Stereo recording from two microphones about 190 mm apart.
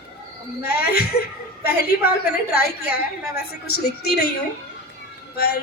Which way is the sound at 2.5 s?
55° left (ahead or behind).